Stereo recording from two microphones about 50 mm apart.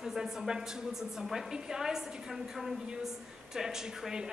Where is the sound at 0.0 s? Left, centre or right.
Centre.